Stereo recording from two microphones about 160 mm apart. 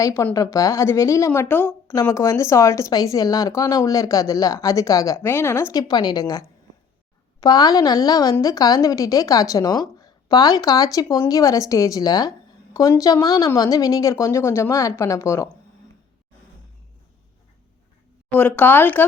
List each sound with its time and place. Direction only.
0.0 s speech: 20° left (ahead or behind)
18.3 s speech: 10° left (ahead or behind)